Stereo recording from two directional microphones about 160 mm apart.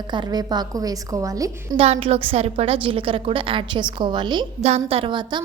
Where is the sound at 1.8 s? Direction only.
40° right (ahead or behind).